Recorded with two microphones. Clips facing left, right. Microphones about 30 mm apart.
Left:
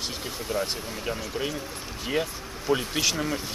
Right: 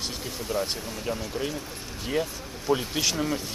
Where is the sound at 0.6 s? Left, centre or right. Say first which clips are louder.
Even; centre.